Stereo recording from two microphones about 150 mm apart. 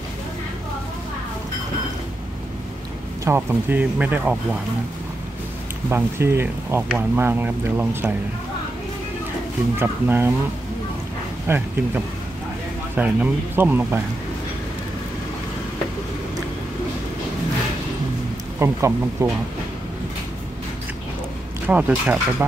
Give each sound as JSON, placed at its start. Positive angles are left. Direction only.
{"t": 3.3, "sound": "speech", "side_deg": -10}
{"t": 5.9, "sound": "speech", "side_deg": -15}
{"t": 9.8, "sound": "speech", "side_deg": -15}
{"t": 11.4, "sound": "speech", "side_deg": -15}
{"t": 18.6, "sound": "speech", "side_deg": -20}
{"t": 21.6, "sound": "speech", "side_deg": -10}